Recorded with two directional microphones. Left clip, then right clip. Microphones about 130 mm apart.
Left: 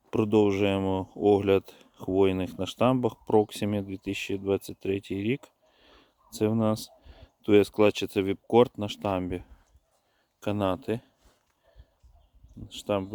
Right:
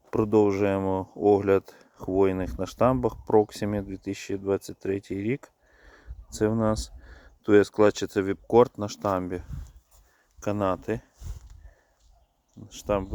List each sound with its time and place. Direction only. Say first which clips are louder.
0.1 s speech: right 2 dB; 25° left (ahead or behind)
12.6 s speech: right 2 dB; 20° left (ahead or behind)